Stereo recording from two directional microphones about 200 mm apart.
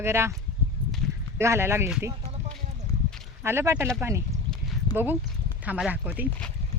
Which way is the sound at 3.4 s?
15° right (ahead or behind).